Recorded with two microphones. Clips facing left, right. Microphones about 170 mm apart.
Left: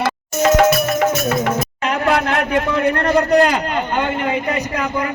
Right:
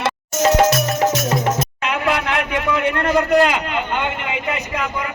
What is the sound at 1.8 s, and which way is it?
A man's voice, 40° left (ahead or behind).